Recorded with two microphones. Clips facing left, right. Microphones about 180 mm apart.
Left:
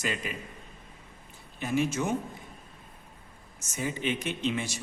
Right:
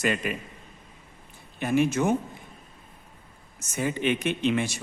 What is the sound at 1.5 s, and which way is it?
Speech, 60° right (ahead or behind).